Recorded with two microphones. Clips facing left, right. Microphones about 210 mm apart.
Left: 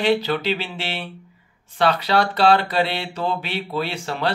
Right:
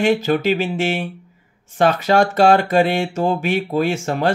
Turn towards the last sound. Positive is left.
turn(degrees=-45)  # may be behind; listen again after turning